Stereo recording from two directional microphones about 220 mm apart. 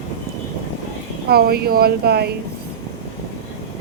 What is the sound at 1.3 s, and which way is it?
Speech, 45° right (ahead or behind).